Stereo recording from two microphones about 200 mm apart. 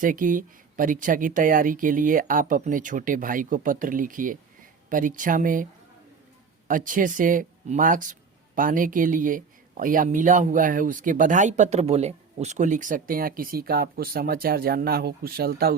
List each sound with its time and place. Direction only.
0.0 s speech: 40° right (ahead or behind)
6.7 s speech: 40° right (ahead or behind)